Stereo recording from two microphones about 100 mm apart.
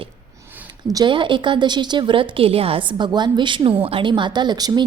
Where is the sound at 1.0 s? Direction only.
55° right (ahead or behind).